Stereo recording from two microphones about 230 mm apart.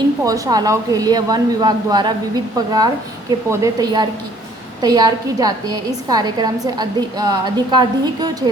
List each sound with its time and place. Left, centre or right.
0.3 s a woman's voice: centre